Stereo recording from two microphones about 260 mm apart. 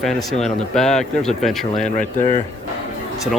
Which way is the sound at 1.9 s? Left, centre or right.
Left.